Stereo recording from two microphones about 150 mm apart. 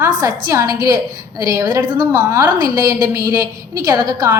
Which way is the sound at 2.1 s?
15° right (ahead or behind).